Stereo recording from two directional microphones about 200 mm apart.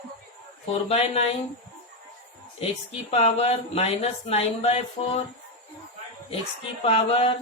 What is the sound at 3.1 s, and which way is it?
Speech, 30° left (ahead or behind).